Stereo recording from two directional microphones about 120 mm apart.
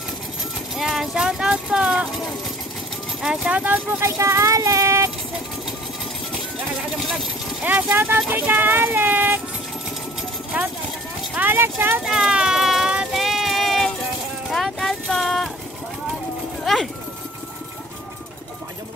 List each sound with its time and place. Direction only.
0.7 s speech: centre (ahead or behind)
3.2 s speech: 5° right (ahead or behind)
4.2 s child singing: 25° right (ahead or behind)
7.6 s speech: 15° right (ahead or behind)
11.3 s speech: 15° right (ahead or behind)
12.0 s a sound: 5° right (ahead or behind)
16.6 s a sound: centre (ahead or behind)